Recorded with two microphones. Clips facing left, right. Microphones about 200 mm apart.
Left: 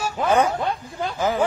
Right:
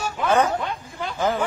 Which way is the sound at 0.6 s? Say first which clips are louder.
Left 4 dB; 35° left (ahead or behind).